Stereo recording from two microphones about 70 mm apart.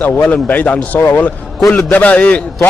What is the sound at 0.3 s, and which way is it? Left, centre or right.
Speech, left.